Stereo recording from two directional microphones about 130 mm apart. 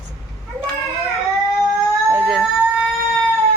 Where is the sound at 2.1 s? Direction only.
5° right (ahead or behind).